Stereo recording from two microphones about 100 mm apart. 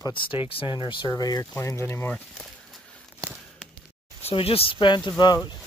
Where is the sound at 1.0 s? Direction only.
40° left (ahead or behind).